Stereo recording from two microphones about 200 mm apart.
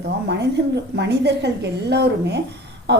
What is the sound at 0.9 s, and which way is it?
A woman's voice, 55° right (ahead or behind).